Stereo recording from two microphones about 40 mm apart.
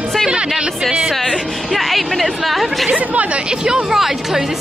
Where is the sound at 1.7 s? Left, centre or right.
Centre.